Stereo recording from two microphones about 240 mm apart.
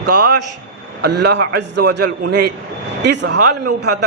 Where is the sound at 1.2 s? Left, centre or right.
Right.